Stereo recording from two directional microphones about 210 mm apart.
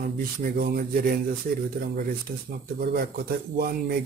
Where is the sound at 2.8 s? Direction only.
45° right (ahead or behind).